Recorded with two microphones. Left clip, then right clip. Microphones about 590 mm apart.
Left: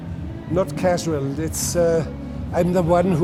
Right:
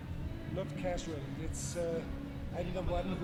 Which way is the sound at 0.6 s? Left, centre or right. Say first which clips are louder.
Left 18 dB; left.